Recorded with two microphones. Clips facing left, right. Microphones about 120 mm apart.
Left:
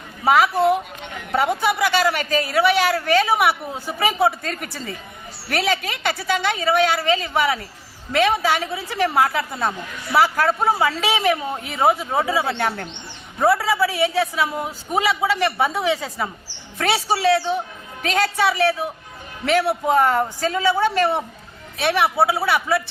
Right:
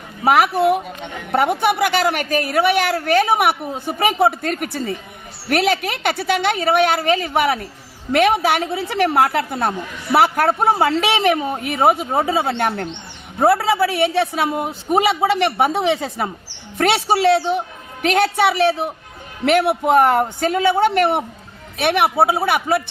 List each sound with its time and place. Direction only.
0.3 s a woman's voice: 60° right (ahead or behind)
11.3 s speech: 20° right (ahead or behind)
11.6 s a woman's voice: 60° right (ahead or behind)
13.7 s a woman's voice: 60° right (ahead or behind)